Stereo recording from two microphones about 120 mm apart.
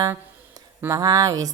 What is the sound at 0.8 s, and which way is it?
Speech, 30° right (ahead or behind).